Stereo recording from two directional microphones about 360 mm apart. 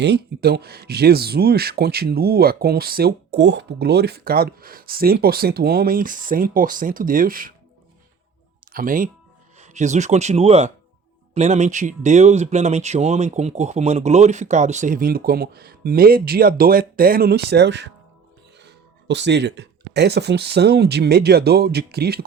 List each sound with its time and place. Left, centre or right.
0.0 s speech: right
8.7 s speech: right